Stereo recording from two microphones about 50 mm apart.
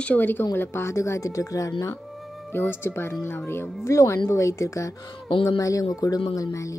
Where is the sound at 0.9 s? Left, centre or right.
Left.